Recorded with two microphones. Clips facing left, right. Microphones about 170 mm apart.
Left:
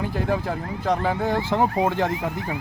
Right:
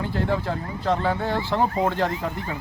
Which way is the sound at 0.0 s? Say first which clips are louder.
Even; 15° left (ahead or behind).